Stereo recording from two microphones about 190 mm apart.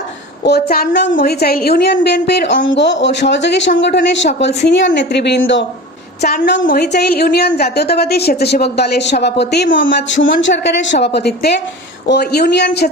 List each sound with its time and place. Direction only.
0.4 s a woman's voice: 55° left (ahead or behind)
6.2 s a woman's voice: 55° left (ahead or behind)